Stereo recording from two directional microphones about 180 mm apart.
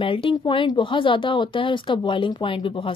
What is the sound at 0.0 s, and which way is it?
A woman's voice, 30° left (ahead or behind).